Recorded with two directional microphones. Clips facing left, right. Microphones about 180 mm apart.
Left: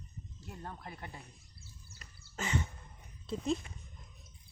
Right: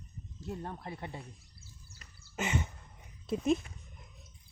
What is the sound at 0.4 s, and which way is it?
Speech, 25° right (ahead or behind).